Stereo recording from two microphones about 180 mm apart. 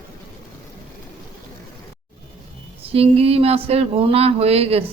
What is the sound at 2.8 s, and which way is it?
Speech, 35° right (ahead or behind).